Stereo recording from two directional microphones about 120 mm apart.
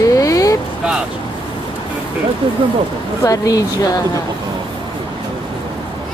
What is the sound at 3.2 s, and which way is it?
Speech, 30° left (ahead or behind).